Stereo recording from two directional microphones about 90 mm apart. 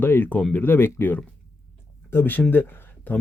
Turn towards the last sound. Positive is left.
turn(degrees=25)  # may be behind; listen again after turning